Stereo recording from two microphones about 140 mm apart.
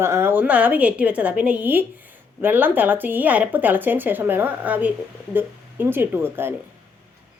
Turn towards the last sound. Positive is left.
turn(degrees=-15)  # may be behind; listen again after turning